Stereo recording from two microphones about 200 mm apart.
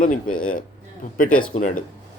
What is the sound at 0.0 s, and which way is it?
Speech, 45° left (ahead or behind).